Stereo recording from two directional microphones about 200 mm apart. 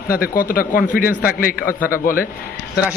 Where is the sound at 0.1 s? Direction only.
45° left (ahead or behind).